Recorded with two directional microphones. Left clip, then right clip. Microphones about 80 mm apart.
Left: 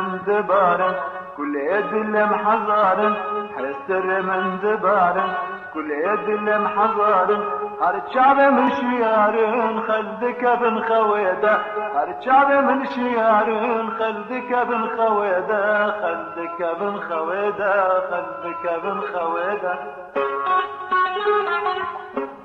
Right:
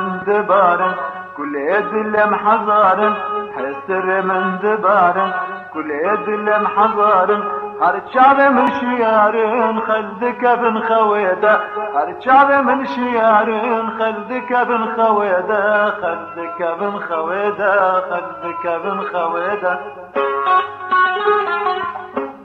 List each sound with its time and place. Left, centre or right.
0.0 s music: right